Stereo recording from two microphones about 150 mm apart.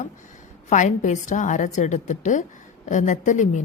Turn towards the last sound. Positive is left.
turn(degrees=55)  # may be behind; listen again after turning